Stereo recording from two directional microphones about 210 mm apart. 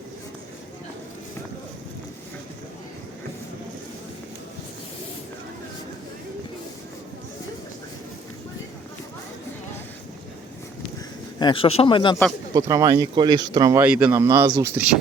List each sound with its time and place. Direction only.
11.3 s speech: 25° left (ahead or behind)
12.5 s speech: 15° right (ahead or behind)
13.8 s speech: 5° right (ahead or behind)